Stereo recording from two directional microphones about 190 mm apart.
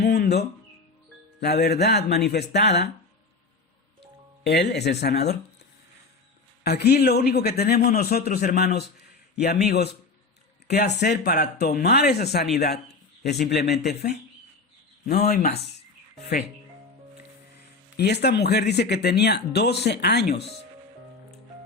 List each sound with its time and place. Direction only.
0.0 s a sound: 60° left (ahead or behind)
1.4 s speech: 60° left (ahead or behind)
4.4 s speech: 60° left (ahead or behind)
6.6 s a man's voice: 55° left (ahead or behind)
15.3 s a man's voice: 40° left (ahead or behind)
17.9 s speech: 60° left (ahead or behind)